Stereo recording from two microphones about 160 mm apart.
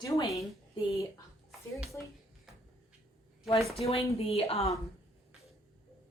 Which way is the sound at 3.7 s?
40° left (ahead or behind).